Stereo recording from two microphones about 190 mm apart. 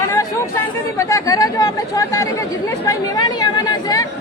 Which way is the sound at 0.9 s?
15° left (ahead or behind).